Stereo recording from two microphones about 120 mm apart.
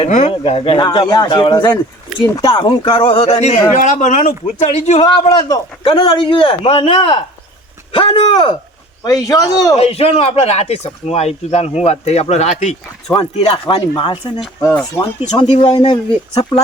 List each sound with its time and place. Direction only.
0.3 s speech: 55° left (ahead or behind)
0.9 s speech: 35° left (ahead or behind)
2.2 s speech: 30° left (ahead or behind)
2.5 s speech: 50° left (ahead or behind); by 4.4 s 90° left
4.6 s speech: 65° left (ahead or behind)
5.0 s speech: 35° left (ahead or behind)
9.0 s speech: 30° left (ahead or behind)
9.7 s speech: 55° left (ahead or behind)
13.1 s speech: 50° left (ahead or behind)
15.4 s speech: 60° left (ahead or behind)
15.8 s speech: 45° left (ahead or behind)